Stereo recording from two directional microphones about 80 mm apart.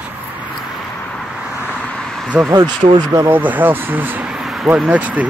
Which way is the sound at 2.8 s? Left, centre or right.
Right.